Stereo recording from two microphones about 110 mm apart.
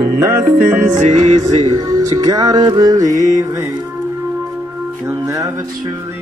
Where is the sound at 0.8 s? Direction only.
90° right.